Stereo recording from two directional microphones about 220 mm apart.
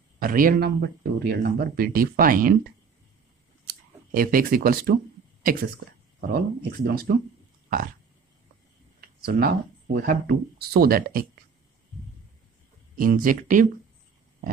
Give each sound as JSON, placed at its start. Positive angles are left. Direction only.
{"t": 0.2, "sound": "speech", "side_deg": -40}
{"t": 3.6, "sound": "cash register", "side_deg": -40}
{"t": 6.3, "sound": "speech", "side_deg": -45}
{"t": 9.2, "sound": "speech", "side_deg": -45}
{"t": 12.9, "sound": "speech", "side_deg": -40}